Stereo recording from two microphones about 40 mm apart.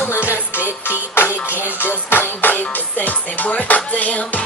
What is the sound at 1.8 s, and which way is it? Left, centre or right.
Music, left.